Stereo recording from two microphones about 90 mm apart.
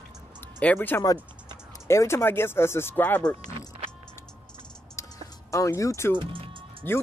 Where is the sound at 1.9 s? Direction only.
30° left (ahead or behind); by 3.3 s 15° left (ahead or behind).